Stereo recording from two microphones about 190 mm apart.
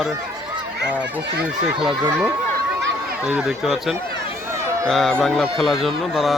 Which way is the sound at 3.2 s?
5° right (ahead or behind).